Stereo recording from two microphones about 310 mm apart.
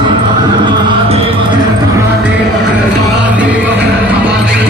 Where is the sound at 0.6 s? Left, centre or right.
Centre.